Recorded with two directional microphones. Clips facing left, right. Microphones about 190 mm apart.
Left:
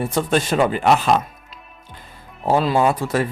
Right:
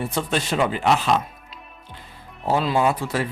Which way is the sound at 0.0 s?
50° left (ahead or behind).